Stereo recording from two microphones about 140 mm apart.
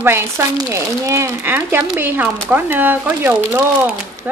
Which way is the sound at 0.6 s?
25° right (ahead or behind).